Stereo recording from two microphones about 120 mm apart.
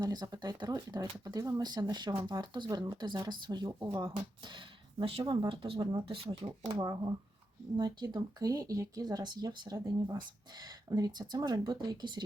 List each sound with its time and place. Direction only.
0.0 s speech: 35° right (ahead or behind)